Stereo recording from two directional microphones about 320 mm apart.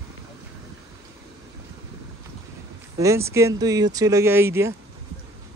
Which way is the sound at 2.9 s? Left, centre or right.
Centre.